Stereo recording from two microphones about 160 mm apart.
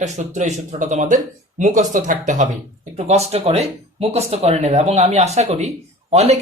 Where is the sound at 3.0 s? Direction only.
40° right (ahead or behind).